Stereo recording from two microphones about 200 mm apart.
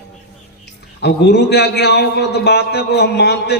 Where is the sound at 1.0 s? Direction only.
55° left (ahead or behind).